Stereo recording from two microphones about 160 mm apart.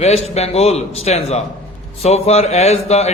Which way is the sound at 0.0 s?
40° left (ahead or behind).